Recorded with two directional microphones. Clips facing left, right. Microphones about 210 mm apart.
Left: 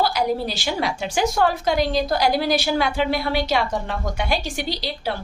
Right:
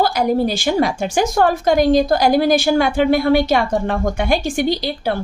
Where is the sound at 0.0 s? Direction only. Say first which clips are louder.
Right 5 dB; 50° right (ahead or behind).